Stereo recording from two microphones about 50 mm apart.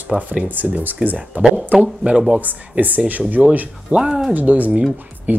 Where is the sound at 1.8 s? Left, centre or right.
Centre.